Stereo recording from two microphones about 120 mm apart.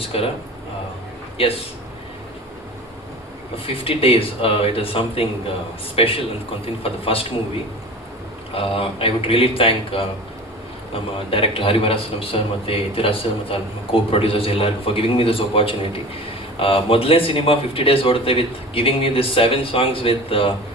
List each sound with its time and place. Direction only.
0.1 s a man's voice: 55° left (ahead or behind)
1.4 s a man's voice: 50° left (ahead or behind)
3.7 s a man's voice: 50° left (ahead or behind)
8.5 s a man's voice: 50° left (ahead or behind)